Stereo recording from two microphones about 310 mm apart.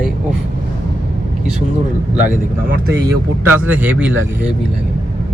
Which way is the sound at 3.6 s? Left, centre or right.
Centre.